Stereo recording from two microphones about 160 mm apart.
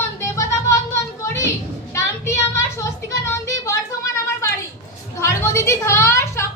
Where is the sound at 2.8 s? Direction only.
20° left (ahead or behind).